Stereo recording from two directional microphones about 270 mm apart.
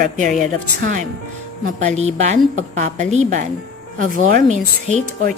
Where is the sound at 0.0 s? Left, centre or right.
Right.